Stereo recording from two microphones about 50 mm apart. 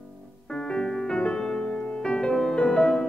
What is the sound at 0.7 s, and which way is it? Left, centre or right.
Music, centre.